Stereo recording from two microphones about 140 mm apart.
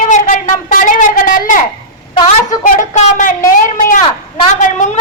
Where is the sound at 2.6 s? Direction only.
65° left (ahead or behind).